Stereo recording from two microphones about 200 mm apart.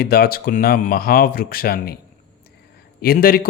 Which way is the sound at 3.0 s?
45° left (ahead or behind).